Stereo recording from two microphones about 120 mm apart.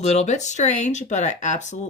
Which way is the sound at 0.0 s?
70° left (ahead or behind).